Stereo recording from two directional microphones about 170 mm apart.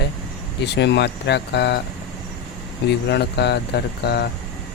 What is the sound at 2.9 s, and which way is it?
Speech, 80° left.